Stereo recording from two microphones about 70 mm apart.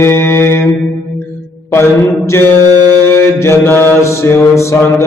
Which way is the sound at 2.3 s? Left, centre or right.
Left.